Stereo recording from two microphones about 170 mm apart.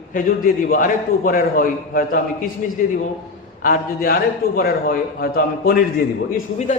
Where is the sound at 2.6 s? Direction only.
45° left (ahead or behind).